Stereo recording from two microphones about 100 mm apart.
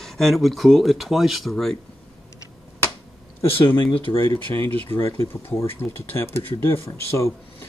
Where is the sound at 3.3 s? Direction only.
60° left (ahead or behind).